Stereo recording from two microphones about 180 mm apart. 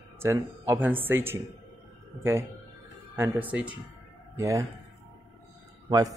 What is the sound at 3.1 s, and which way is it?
Speech, 15° right (ahead or behind).